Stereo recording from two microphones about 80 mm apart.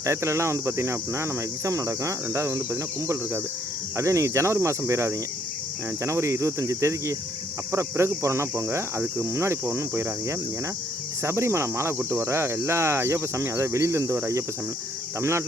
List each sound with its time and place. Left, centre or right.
0.0 s speech: right
3.9 s speech: right